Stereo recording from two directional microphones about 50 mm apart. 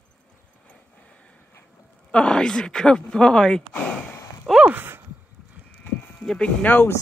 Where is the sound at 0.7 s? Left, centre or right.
Left.